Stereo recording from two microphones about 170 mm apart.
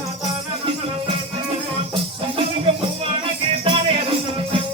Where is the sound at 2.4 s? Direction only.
35° right (ahead or behind).